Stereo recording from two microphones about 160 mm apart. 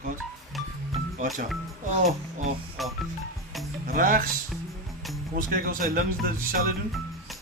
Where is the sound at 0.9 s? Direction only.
45° right (ahead or behind).